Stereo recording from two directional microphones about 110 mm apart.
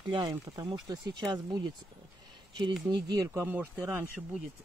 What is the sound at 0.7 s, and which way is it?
Speech, 45° right (ahead or behind).